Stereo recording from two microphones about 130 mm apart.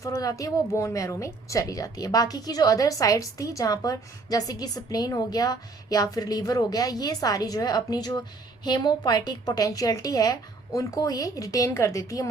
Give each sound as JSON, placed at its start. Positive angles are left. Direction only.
{"t": 0.0, "sound": "a woman's voice", "side_deg": 25}